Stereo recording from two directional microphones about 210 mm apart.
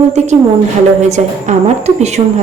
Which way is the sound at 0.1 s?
30° right (ahead or behind).